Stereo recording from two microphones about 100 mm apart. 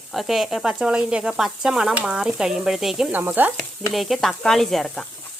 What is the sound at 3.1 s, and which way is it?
Stir, 20° right (ahead or behind).